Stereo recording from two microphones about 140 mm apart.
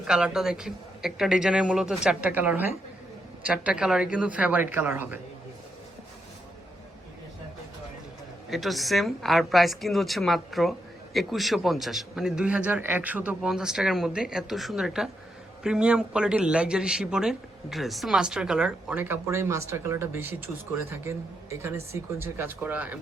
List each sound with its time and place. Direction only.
0.0 s a woman's voice: 5° right (ahead or behind)
8.4 s a woman's voice: centre (ahead or behind)